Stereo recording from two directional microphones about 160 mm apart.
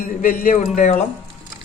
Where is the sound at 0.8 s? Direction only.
45° left (ahead or behind).